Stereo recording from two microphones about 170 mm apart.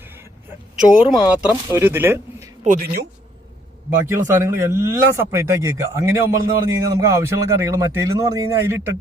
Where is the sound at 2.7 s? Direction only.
45° right (ahead or behind).